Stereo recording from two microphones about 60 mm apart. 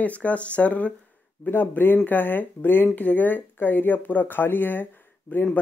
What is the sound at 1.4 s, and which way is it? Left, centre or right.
Speech, left.